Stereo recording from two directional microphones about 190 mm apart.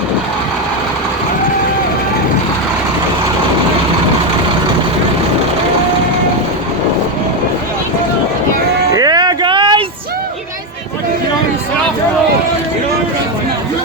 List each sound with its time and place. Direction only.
8.9 s music: 20° right (ahead or behind)